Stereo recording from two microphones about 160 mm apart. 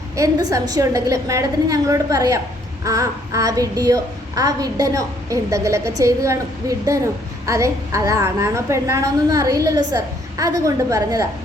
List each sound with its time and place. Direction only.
0.5 s a woman's voice: 20° right (ahead or behind)